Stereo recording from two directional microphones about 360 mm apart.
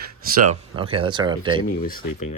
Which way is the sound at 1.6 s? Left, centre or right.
Left.